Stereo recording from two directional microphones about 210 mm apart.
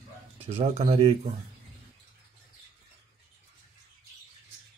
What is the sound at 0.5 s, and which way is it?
Speech, 30° right (ahead or behind).